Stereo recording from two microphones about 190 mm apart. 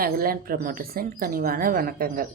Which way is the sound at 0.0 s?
50° right (ahead or behind).